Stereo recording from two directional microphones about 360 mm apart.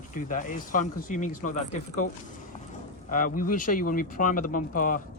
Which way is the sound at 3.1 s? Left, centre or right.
Left.